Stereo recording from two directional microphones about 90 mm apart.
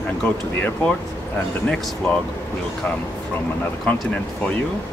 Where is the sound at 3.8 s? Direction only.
15° left (ahead or behind).